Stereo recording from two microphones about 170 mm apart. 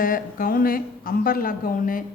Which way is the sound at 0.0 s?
55° left (ahead or behind).